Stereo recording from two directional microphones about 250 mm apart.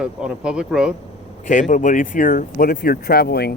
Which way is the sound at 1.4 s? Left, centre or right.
Left.